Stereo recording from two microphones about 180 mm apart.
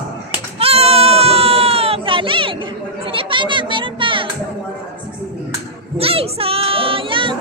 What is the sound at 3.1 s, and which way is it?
Children playing, 30° right (ahead or behind).